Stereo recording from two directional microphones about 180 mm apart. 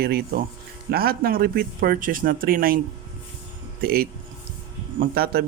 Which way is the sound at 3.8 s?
55° right (ahead or behind).